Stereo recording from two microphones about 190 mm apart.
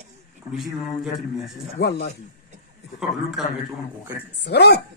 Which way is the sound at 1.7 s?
60° left (ahead or behind).